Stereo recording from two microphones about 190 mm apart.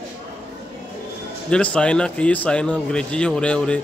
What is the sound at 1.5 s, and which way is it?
Speech, 5° left (ahead or behind).